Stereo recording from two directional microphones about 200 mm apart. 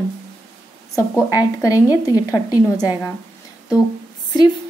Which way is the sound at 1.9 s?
10° right (ahead or behind).